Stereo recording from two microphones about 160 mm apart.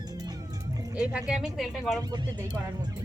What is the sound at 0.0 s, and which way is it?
Music, 25° right (ahead or behind).